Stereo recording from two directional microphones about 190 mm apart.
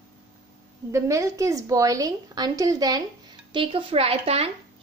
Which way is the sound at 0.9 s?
15° right (ahead or behind).